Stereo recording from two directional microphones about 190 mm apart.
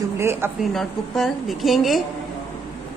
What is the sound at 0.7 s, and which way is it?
A woman's voice, centre (ahead or behind).